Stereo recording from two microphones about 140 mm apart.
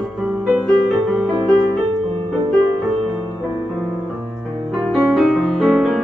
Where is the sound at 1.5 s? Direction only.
35° right (ahead or behind).